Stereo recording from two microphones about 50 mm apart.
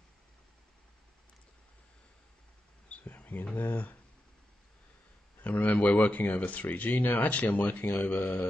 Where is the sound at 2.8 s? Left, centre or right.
Left.